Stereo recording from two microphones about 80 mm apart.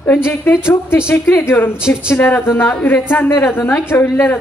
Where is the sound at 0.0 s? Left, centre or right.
Left.